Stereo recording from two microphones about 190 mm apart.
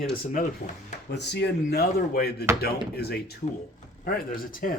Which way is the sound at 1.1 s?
65° left (ahead or behind).